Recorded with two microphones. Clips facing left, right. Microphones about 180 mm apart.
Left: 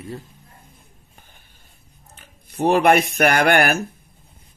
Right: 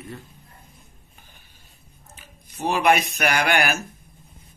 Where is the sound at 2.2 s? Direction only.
55° left (ahead or behind).